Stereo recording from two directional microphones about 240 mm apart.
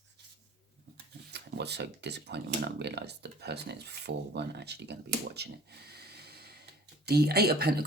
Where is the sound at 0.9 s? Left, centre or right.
Right.